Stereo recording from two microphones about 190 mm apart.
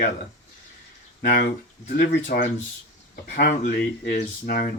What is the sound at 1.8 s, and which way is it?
Speech, 50° left (ahead or behind).